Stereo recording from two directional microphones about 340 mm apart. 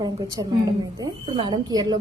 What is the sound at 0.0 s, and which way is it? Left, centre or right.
A woman's voice, centre.